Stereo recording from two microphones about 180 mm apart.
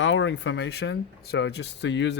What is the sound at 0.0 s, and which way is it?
Speech, 90° left.